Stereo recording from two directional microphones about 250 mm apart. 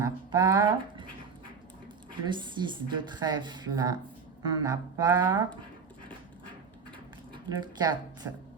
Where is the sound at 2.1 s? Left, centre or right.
Centre.